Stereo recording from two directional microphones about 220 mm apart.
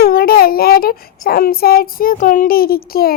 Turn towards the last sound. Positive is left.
turn(degrees=45)  # may be behind; listen again after turning